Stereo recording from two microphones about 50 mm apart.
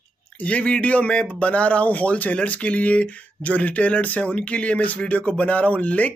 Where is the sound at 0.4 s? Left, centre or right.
Left.